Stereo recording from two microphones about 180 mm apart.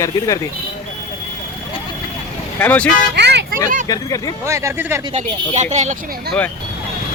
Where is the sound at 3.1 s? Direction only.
70° right (ahead or behind).